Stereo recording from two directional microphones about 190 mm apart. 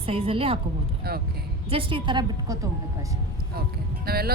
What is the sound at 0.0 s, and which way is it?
Speech, 30° right (ahead or behind).